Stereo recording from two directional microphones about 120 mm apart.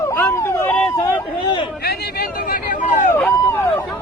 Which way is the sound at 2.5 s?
90° left.